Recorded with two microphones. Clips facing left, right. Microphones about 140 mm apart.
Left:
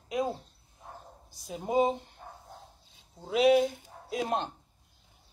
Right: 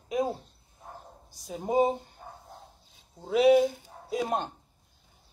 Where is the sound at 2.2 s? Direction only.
10° right (ahead or behind).